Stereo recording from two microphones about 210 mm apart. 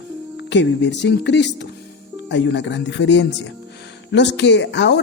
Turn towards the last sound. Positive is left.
turn(degrees=55)  # may be behind; listen again after turning